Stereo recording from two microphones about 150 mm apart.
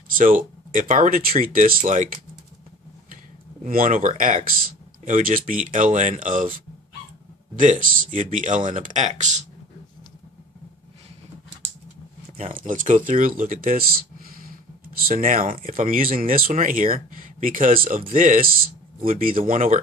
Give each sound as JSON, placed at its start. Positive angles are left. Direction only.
{"t": 0.2, "sound": "speech", "side_deg": -60}
{"t": 3.6, "sound": "speech", "side_deg": -65}
{"t": 7.5, "sound": "speech", "side_deg": -60}
{"t": 12.5, "sound": "speech", "side_deg": -60}
{"t": 15.0, "sound": "speech", "side_deg": -65}